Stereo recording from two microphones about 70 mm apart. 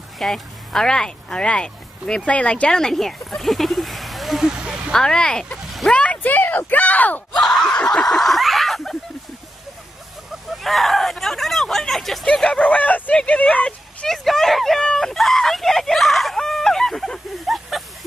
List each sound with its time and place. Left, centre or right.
0.2 s speech: centre
4.6 s speech: centre
4.9 s speech: centre
5.9 s speech: left
7.3 s speech: centre
8.1 s a sound: centre
10.5 s hubbub: centre
12.3 s speech: centre
14.0 s a sound: centre